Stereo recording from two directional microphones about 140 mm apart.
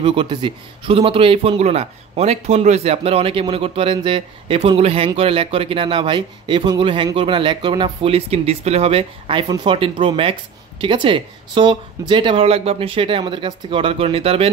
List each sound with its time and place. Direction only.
0.0 s a man's voice: 35° right (ahead or behind)